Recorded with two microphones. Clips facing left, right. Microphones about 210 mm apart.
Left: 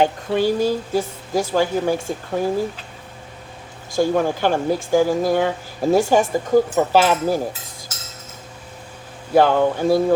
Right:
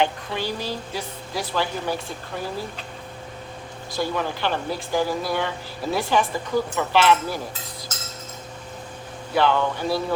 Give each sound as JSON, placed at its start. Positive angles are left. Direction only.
{"t": 0.0, "sound": "speech", "side_deg": 50}
{"t": 3.9, "sound": "speech", "side_deg": 45}
{"t": 9.3, "sound": "speech", "side_deg": 45}